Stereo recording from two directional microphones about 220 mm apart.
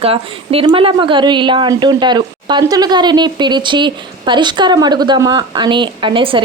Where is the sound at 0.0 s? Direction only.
25° right (ahead or behind).